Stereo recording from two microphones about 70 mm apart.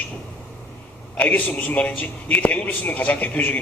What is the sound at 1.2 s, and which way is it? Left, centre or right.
A man's voice, left.